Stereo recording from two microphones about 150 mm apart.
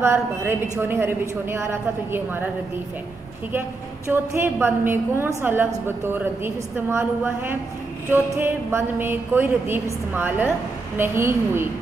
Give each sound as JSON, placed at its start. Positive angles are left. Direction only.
{"t": 0.0, "sound": "a woman's voice", "side_deg": -15}
{"t": 4.1, "sound": "a woman's voice", "side_deg": -15}